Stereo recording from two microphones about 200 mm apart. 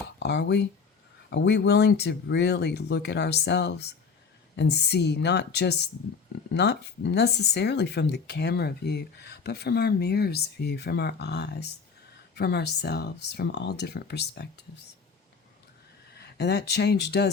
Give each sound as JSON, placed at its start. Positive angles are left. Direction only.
{"t": 0.2, "sound": "speech", "side_deg": 60}
{"t": 16.1, "sound": "speech", "side_deg": 55}